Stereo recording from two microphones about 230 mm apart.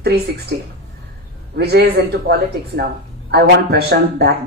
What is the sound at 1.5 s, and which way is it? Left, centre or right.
Speech, right.